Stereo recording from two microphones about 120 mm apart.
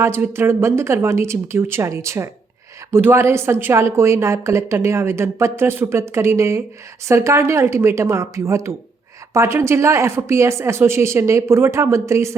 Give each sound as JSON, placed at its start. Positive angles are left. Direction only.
{"t": 0.0, "sound": "a woman's voice", "side_deg": -20}